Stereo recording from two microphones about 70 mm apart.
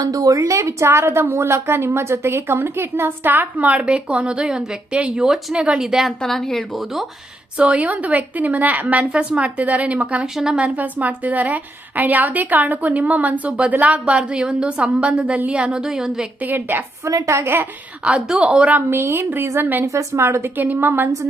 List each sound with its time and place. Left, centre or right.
0.0 s a woman's voice: right
0.3 s a woman's voice: right; by 6.1 s centre
6.2 s speech: centre
7.6 s a woman's voice: centre
10.8 s a woman's voice: right
16.5 s a woman's voice: right
17.1 s a woman's voice: right
18.0 s speech: centre
18.9 s a woman's voice: right
19.8 s a woman's voice: right
20.6 s a woman's voice: right